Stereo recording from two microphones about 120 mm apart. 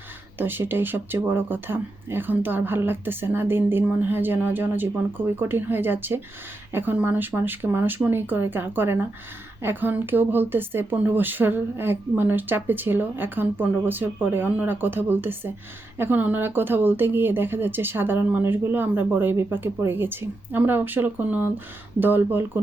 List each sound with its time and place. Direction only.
0.3 s speech: 15° right (ahead or behind)